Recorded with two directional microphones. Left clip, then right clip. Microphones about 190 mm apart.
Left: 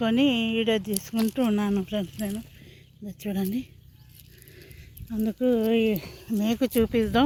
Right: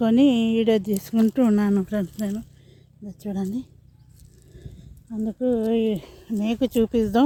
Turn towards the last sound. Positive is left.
turn(degrees=0)  # may be behind; listen again after turning